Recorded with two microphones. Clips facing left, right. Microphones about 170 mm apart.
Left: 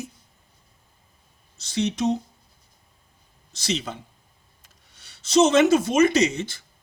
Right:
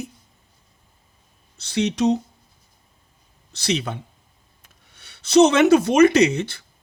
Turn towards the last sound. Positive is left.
turn(degrees=-65)  # may be behind; listen again after turning